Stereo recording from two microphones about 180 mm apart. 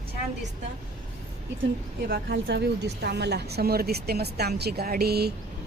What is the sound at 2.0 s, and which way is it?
A woman's voice, 60° right (ahead or behind).